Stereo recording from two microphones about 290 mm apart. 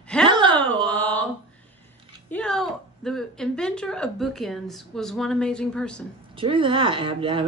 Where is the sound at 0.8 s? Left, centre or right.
Centre.